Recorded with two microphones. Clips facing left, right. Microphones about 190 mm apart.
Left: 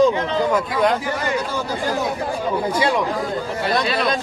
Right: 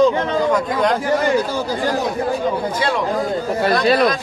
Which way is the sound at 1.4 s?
35° right (ahead or behind).